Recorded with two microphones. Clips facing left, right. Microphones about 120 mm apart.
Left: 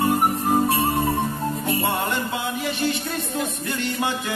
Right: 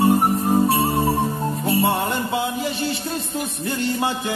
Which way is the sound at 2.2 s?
25° right (ahead or behind).